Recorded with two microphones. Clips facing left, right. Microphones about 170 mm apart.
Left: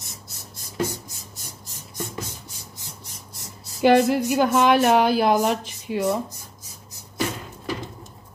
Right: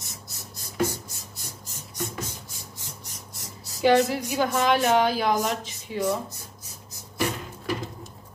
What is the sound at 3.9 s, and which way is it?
A woman's voice, 65° left (ahead or behind).